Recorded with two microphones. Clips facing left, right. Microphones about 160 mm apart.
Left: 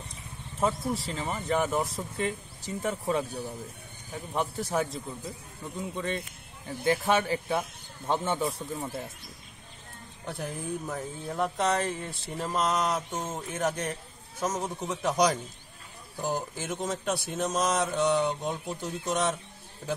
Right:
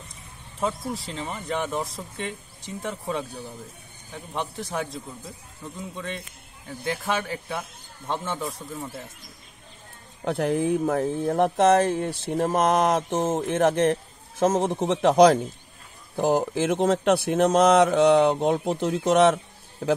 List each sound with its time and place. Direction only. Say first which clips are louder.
0.6 s speech: even; centre (ahead or behind)
10.2 s speech: right 12 dB; 75° right (ahead or behind)
12.4 s a man's voice: right 6 dB; 50° right (ahead or behind)